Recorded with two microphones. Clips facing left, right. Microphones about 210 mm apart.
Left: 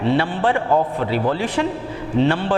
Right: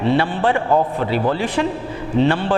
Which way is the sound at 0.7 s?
25° right (ahead or behind).